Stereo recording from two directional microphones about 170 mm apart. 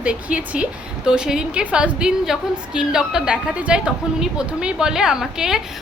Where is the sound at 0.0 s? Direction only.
5° right (ahead or behind).